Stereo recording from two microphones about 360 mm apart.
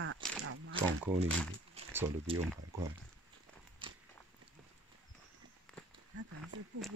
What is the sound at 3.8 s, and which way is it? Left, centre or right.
Biting, centre.